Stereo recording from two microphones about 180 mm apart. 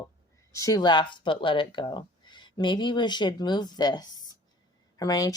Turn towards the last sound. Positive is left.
turn(degrees=20)  # may be behind; listen again after turning